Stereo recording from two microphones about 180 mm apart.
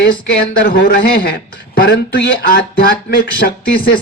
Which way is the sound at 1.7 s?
65° left (ahead or behind).